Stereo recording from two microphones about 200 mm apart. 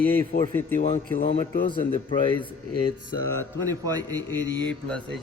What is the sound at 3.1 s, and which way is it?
Mantra, 85° right.